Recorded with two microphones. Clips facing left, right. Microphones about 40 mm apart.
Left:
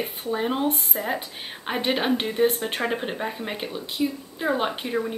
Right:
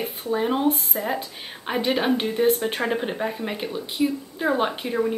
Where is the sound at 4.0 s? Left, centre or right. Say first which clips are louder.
Right 3 dB; centre.